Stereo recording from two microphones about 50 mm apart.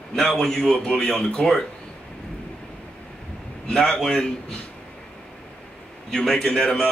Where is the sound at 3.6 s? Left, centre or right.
Centre.